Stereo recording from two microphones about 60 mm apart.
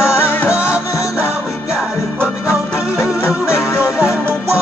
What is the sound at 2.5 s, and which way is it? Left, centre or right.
Music, left.